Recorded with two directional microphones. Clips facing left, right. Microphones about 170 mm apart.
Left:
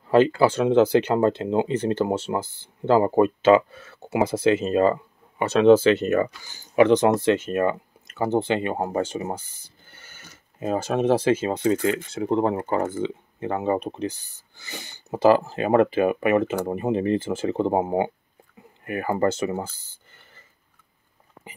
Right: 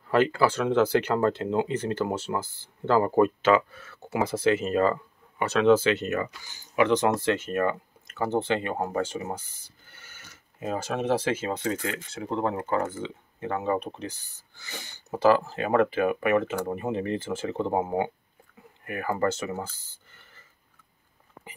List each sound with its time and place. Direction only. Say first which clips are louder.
0.0 s speech: left 5 dB; 25° left (ahead or behind)
6.9 s speech: left 5 dB; 20° left (ahead or behind)
10.6 s speech: left 6 dB; 25° left (ahead or behind)